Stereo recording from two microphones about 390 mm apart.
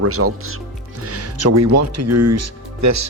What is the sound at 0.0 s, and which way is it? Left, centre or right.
Speech, right.